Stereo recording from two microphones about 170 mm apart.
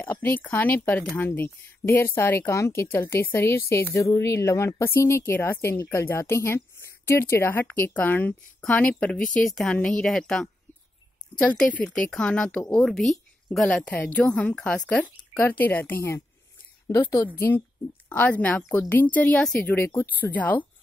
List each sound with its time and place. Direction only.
0.0 s a woman's voice: 10° left (ahead or behind)
18.1 s speech: 10° left (ahead or behind)